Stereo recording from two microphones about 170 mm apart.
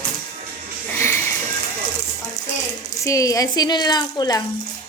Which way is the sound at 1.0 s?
15° left (ahead or behind).